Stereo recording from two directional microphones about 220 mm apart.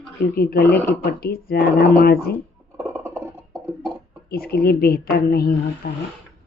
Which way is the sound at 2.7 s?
10° right (ahead or behind).